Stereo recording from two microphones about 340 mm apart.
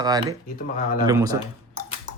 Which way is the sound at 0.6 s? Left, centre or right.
Left.